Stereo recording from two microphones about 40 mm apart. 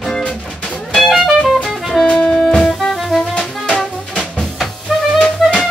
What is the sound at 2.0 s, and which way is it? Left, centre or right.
Music, centre.